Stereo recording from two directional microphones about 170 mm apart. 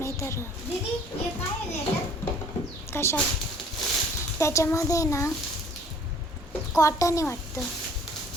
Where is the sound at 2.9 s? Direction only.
15° left (ahead or behind).